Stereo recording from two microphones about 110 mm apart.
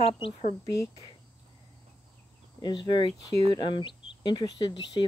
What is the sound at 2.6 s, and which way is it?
Speech, 45° left (ahead or behind).